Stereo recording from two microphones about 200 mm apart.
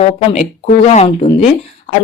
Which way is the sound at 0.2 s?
30° left (ahead or behind).